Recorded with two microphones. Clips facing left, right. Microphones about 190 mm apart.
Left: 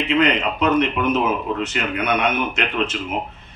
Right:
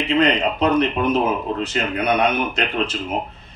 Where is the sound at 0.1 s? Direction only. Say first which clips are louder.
Right 1 dB; 35° right (ahead or behind).